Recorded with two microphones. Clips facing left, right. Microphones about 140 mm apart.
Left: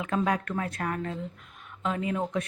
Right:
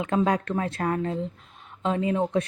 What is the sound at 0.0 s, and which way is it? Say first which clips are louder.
A woman's voice: right 4 dB; 30° right (ahead or behind).